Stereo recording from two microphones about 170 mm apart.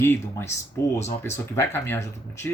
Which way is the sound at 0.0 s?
15° left (ahead or behind).